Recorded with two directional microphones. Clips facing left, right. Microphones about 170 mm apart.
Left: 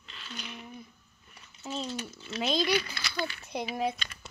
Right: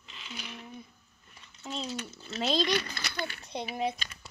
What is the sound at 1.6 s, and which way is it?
Speech, centre (ahead or behind).